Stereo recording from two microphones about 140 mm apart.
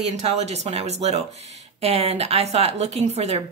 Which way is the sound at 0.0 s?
45° right (ahead or behind).